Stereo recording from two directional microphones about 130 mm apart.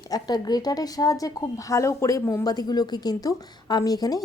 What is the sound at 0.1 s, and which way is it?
Speech, 30° left (ahead or behind).